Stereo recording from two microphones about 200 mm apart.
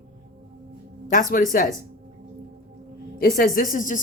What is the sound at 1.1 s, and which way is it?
Speech, 40° left (ahead or behind).